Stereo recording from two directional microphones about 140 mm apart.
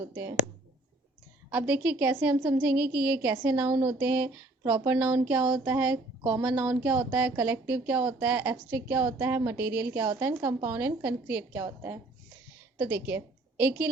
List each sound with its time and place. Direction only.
0.1 s speech: 15° right (ahead or behind)
1.5 s a woman's voice: 10° right (ahead or behind)